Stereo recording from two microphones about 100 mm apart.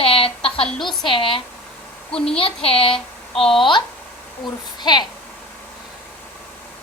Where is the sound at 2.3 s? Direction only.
70° left (ahead or behind).